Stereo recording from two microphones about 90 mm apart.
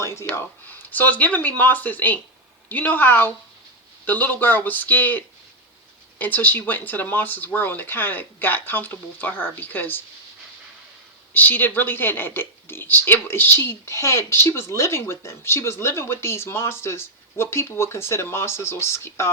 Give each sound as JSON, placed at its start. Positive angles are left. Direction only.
{"t": 0.0, "sound": "a sound", "side_deg": 30}
{"t": 0.3, "sound": "a woman's voice", "side_deg": 20}
{"t": 11.3, "sound": "a woman's voice", "side_deg": 20}